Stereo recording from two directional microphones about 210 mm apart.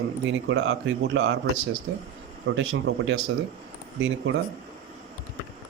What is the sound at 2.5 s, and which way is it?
Speech, 60° right (ahead or behind).